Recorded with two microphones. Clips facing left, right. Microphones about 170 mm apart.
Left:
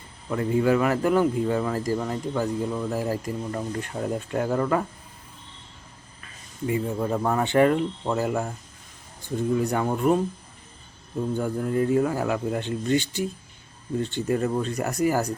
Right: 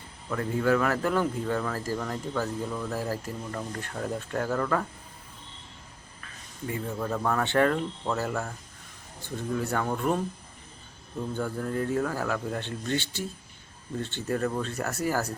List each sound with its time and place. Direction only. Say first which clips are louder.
0.3 s speech: left 4 dB; 15° left (ahead or behind)
6.7 s speech: left 6 dB; 15° left (ahead or behind)
9.6 s speech: left 5 dB; 15° left (ahead or behind)
11.3 s speech: left 5 dB; 10° left (ahead or behind)